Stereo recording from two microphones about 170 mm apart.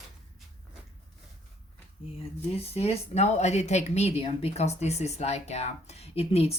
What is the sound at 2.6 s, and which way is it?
Speech, 35° left (ahead or behind).